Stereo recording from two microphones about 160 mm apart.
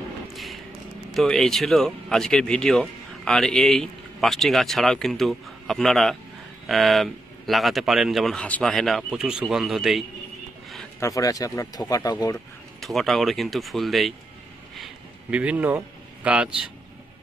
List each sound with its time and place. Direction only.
0.3 s a sound: centre (ahead or behind)
1.1 s speech: centre (ahead or behind)
11.0 s speech: 20° left (ahead or behind)
12.8 s speech: centre (ahead or behind)
15.3 s a man's voice: 10° right (ahead or behind)